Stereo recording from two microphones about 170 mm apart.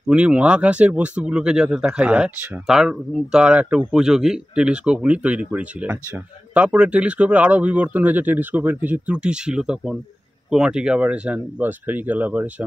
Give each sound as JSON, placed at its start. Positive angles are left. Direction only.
{"t": 0.1, "sound": "speech", "side_deg": -5}